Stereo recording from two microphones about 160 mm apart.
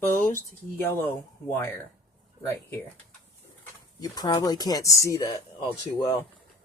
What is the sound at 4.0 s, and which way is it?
Speech, 25° left (ahead or behind).